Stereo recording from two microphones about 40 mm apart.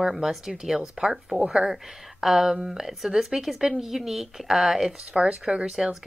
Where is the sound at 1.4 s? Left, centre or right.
Right.